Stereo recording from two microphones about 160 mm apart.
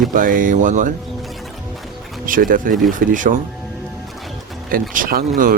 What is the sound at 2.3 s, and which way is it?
Speech, 60° right (ahead or behind).